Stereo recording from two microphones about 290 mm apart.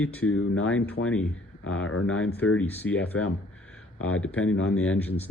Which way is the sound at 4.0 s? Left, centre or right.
Left.